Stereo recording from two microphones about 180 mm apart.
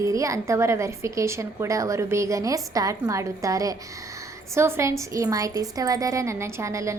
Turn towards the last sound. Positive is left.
turn(degrees=-15)  # may be behind; listen again after turning